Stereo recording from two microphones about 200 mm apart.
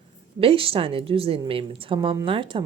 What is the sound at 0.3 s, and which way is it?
Speech, 25° right (ahead or behind).